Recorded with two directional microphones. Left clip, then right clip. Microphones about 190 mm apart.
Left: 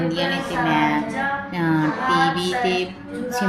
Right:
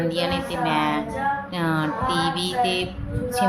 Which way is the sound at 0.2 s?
5° left (ahead or behind).